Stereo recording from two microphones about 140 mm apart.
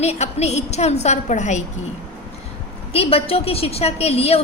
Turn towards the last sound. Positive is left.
turn(degrees=45)  # may be behind; listen again after turning